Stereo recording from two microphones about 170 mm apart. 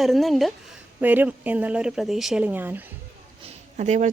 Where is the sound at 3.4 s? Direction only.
40° right (ahead or behind).